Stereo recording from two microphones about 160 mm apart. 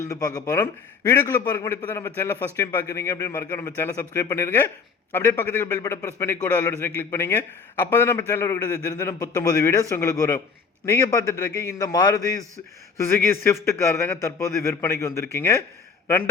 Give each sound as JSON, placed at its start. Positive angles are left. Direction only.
{"t": 0.0, "sound": "a man's voice", "side_deg": 20}